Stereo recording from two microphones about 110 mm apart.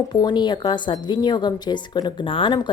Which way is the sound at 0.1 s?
40° left (ahead or behind).